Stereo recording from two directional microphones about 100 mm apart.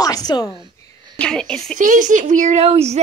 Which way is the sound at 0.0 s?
40° left (ahead or behind).